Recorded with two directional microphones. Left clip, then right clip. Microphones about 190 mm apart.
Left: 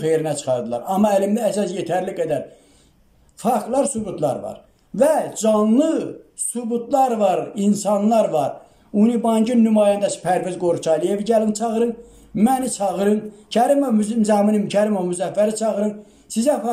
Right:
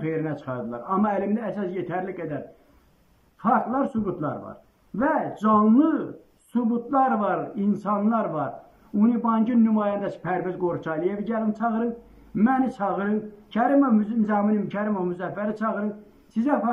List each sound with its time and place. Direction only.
0.0 s a man's voice: 20° left (ahead or behind)
3.4 s a man's voice: 15° left (ahead or behind)